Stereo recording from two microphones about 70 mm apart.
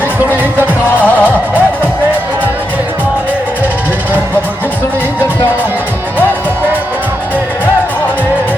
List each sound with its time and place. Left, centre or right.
0.9 s music: left